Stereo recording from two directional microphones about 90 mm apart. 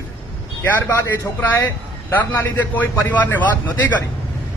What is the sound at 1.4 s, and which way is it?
A man's voice, 20° left (ahead or behind).